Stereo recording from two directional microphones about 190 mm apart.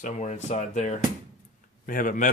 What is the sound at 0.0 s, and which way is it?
Speech, 35° left (ahead or behind).